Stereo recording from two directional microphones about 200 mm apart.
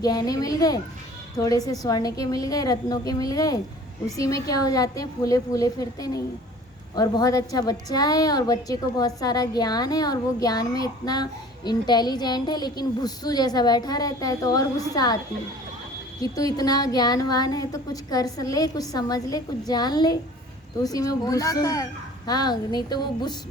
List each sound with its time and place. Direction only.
0.0 s a woman's voice: 20° left (ahead or behind)
16.2 s a woman's voice: 20° left (ahead or behind)